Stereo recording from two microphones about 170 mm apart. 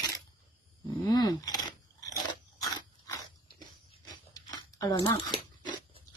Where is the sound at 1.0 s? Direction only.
25° left (ahead or behind).